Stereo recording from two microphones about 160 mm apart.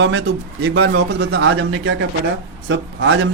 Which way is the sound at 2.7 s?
90° right.